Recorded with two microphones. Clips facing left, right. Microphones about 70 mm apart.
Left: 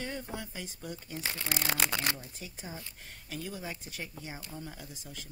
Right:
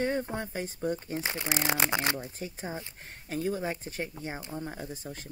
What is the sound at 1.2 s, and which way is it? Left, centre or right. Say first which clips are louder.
Speech: right 1 dB; right.